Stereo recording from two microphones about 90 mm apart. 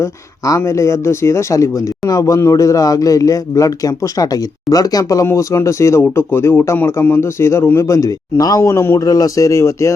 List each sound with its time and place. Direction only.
0.0 s speech: 35° left (ahead or behind)
8.7 s speech: 30° left (ahead or behind)
9.0 s speech: 40° left (ahead or behind)